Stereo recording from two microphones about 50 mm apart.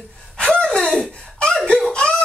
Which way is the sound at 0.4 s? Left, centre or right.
Centre.